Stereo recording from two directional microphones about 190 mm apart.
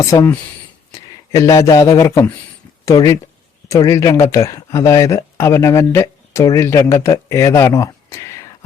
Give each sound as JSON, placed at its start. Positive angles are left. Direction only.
{"t": 0.0, "sound": "speech", "side_deg": 15}